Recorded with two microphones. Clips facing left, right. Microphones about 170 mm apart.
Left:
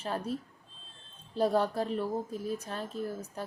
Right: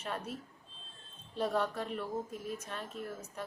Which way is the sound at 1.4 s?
35° left (ahead or behind).